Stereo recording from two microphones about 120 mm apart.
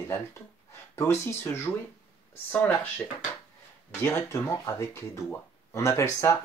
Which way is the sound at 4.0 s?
20° left (ahead or behind).